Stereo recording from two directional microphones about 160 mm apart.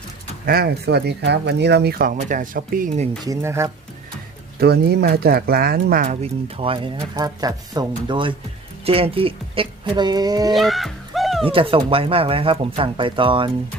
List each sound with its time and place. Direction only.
0.4 s speech: 75° right (ahead or behind)
2.1 s speech: 55° right (ahead or behind)
3.2 s speech: 15° right (ahead or behind)
4.6 s speech: 85° right; by 6.1 s 60° right (ahead or behind)
6.2 s speech: 35° right (ahead or behind)
10.5 s music: centre (ahead or behind)
11.4 s speech: 35° right (ahead or behind)